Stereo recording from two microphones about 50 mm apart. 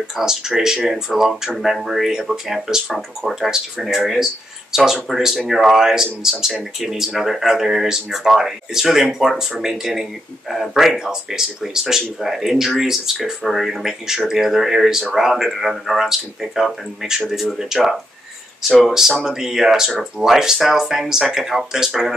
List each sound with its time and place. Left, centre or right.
0.2 s speech: centre
18.7 s speech: centre
18.9 s speech: centre